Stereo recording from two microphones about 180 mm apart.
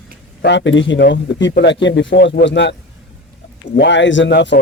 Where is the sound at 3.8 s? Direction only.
80° left.